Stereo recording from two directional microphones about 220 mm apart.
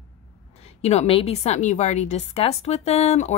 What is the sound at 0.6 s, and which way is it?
A woman's voice, 30° left (ahead or behind).